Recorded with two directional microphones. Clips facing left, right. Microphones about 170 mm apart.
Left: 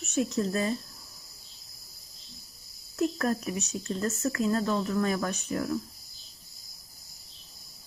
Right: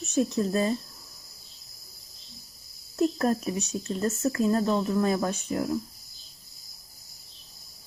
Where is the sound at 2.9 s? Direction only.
30° right (ahead or behind).